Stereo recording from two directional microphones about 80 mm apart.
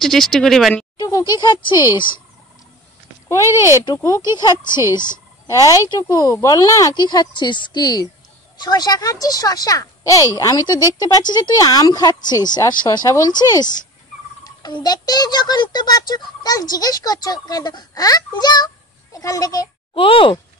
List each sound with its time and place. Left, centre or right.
0.0 s speech: centre
1.4 s speech: left
3.3 s a child's voice: left
5.5 s a child's voice: left
7.0 s a child's voice: left
19.1 s a child's voice: left
19.9 s speech: left